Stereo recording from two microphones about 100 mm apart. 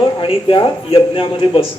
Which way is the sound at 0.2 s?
60° left (ahead or behind).